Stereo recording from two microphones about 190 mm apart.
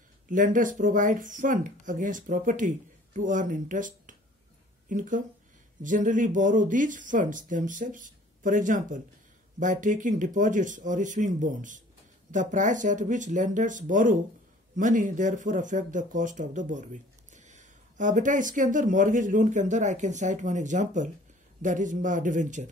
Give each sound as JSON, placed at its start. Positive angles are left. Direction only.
{"t": 0.3, "sound": "speech", "side_deg": -45}